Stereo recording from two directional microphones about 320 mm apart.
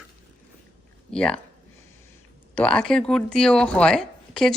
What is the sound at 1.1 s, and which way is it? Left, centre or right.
Speech, centre.